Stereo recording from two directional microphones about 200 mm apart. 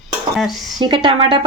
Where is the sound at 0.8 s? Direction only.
25° right (ahead or behind).